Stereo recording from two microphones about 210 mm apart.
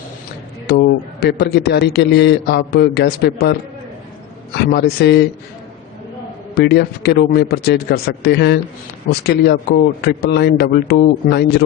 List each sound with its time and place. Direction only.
0.7 s a man's voice: 50° left (ahead or behind)
4.5 s a man's voice: 50° left (ahead or behind)
6.5 s a man's voice: 50° left (ahead or behind)